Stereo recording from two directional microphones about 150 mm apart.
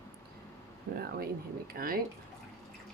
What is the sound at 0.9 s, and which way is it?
Speech, 90° right.